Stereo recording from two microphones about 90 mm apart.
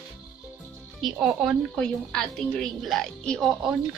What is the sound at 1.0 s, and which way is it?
Speech, 10° right (ahead or behind).